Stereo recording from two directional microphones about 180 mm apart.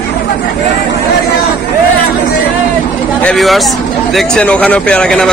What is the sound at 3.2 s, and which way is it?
Speech, 5° left (ahead or behind).